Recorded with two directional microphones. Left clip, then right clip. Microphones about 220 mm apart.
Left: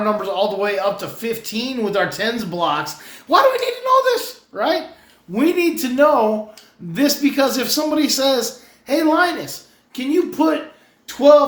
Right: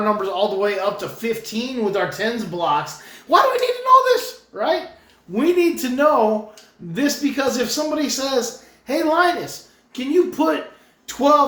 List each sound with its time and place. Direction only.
0.0 s speech: 20° left (ahead or behind)
3.2 s speech: 15° left (ahead or behind)
4.5 s speech: 30° left (ahead or behind)